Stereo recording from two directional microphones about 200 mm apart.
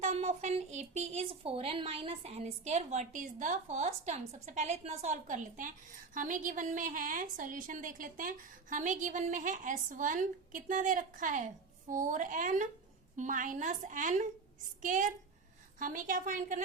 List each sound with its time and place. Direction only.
0.0 s a woman's voice: 35° right (ahead or behind)